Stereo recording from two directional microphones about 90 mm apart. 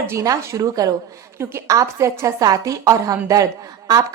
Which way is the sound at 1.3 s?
30° right (ahead or behind).